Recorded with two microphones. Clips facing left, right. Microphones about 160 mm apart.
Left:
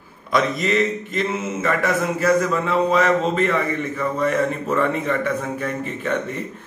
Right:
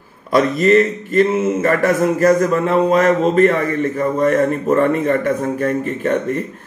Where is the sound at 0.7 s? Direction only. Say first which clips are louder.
Right 8 dB; 50° right (ahead or behind).